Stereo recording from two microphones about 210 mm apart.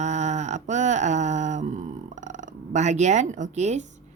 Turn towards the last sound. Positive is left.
turn(degrees=-35)  # may be behind; listen again after turning